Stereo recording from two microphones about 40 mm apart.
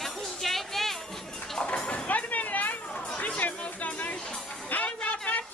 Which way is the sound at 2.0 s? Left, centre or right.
Left.